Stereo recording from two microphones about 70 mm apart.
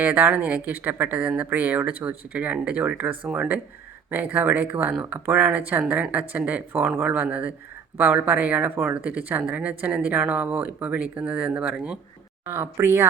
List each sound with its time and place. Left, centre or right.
0.0 s speech: right
12.8 s speech: right